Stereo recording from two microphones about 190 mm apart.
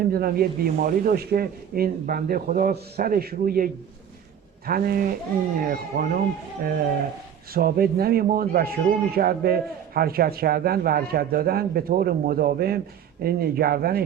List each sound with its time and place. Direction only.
0.1 s speech: 50° right (ahead or behind)